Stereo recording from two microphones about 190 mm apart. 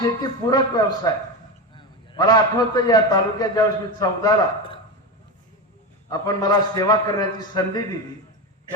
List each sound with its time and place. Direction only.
0.0 s a man's voice: 20° left (ahead or behind)
6.1 s a man's voice: 20° left (ahead or behind)